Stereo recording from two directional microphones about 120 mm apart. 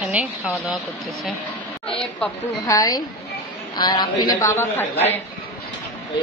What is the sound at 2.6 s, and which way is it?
A man's voice, 30° left (ahead or behind).